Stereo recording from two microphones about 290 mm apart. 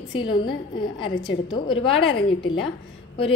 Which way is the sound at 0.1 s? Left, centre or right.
Centre.